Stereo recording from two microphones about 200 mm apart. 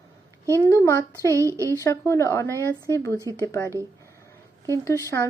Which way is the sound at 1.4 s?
15° right (ahead or behind).